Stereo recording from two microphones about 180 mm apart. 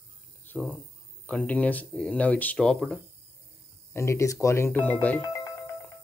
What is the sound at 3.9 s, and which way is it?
Speech, 15° left (ahead or behind).